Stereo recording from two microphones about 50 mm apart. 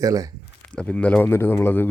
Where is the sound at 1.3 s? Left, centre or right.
Left.